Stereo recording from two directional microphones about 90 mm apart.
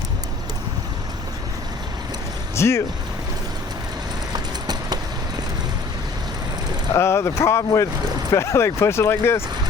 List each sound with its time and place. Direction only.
2.6 s speech: 30° left (ahead or behind)
4.6 s vehicle: 50° right (ahead or behind)
6.9 s speech: 30° left (ahead or behind)